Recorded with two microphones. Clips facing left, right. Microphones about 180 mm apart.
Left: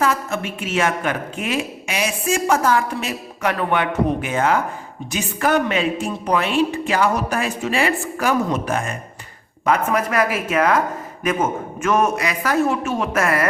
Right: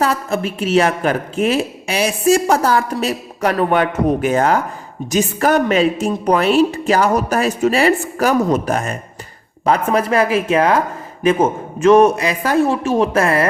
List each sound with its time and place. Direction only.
0.0 s a woman's voice: 35° right (ahead or behind)